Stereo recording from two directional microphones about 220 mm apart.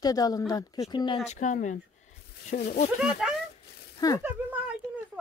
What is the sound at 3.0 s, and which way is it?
Speech, centre (ahead or behind).